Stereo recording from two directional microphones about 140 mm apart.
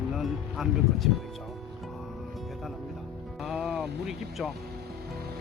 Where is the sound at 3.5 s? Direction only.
5° right (ahead or behind).